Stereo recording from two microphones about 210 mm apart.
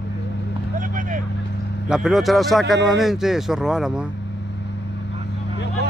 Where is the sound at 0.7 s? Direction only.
40° right (ahead or behind).